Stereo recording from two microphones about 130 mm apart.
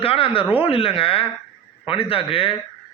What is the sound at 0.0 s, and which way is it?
A man's voice, 45° left (ahead or behind).